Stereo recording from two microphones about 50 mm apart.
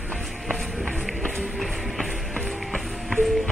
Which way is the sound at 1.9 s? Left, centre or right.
Centre.